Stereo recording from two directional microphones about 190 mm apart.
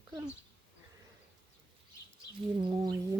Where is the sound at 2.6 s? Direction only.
20° right (ahead or behind).